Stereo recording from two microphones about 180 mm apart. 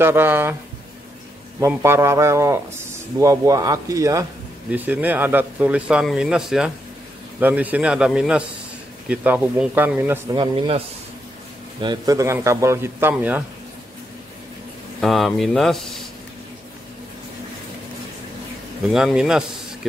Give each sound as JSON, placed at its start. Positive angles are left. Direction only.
{"t": 0.0, "sound": "a man's voice", "side_deg": -10}
{"t": 1.6, "sound": "a man's voice", "side_deg": -15}
{"t": 10.3, "sound": "speech", "side_deg": -25}
{"t": 11.8, "sound": "a man's voice", "side_deg": -20}
{"t": 15.0, "sound": "speech", "side_deg": 0}
{"t": 18.9, "sound": "a man's voice", "side_deg": -5}